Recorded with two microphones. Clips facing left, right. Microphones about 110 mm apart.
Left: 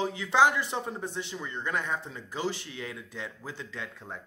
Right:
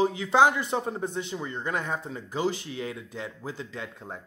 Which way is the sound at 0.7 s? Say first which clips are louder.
Right 5 dB; 35° right (ahead or behind).